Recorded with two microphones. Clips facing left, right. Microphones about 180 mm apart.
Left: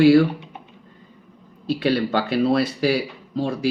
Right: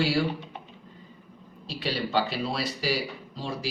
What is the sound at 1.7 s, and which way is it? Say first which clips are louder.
Speech: left 10 dB; 55° left (ahead or behind).